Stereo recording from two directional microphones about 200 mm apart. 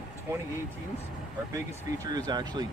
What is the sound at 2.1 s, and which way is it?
Speech, 20° right (ahead or behind).